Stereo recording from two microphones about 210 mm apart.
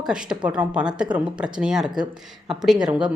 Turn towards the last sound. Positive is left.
turn(degrees=-5)  # may be behind; listen again after turning